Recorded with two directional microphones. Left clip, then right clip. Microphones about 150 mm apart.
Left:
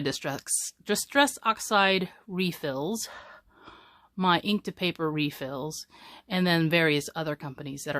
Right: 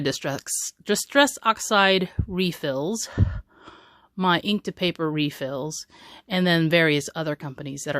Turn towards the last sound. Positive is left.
turn(degrees=-25)  # may be behind; listen again after turning